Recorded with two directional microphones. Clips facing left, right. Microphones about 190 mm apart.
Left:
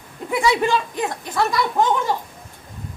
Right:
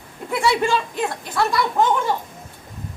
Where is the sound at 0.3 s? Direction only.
15° left (ahead or behind).